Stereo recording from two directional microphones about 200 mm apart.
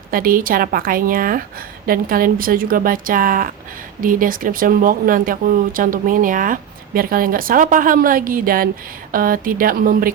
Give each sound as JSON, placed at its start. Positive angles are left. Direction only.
{"t": 0.1, "sound": "speech", "side_deg": -45}